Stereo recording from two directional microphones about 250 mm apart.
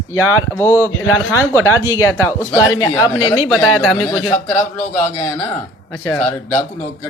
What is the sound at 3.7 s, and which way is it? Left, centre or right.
Speech, centre.